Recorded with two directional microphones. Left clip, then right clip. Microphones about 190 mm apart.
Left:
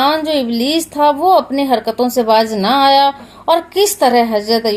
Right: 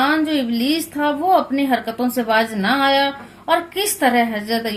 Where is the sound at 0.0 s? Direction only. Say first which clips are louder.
Left 4 dB; 40° left (ahead or behind).